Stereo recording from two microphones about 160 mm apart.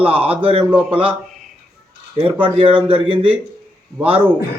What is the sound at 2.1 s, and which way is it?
A man's voice, 35° right (ahead or behind).